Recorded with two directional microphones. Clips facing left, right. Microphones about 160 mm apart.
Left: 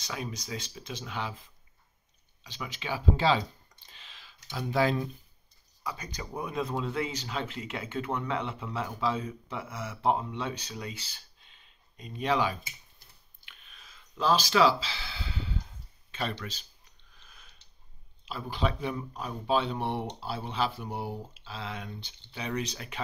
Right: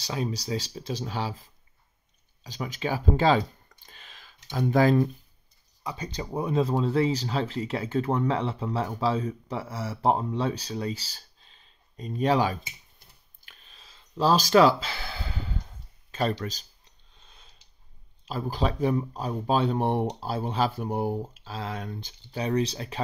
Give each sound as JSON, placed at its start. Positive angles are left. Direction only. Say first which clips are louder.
{"t": 0.0, "sound": "speech", "louder": "right 7 dB", "side_deg": -30}
{"t": 2.4, "sound": "speech", "louder": "right 7 dB", "side_deg": -40}
{"t": 5.9, "sound": "speech", "louder": "right 5 dB", "side_deg": -30}
{"t": 13.4, "sound": "a sound", "louder": "even", "side_deg": -40}
{"t": 16.1, "sound": "speech", "louder": "right 7 dB", "side_deg": -40}
{"t": 17.1, "sound": "sniff", "louder": "right 1 dB", "side_deg": -25}
{"t": 18.2, "sound": "speech", "louder": "right 3 dB", "side_deg": -40}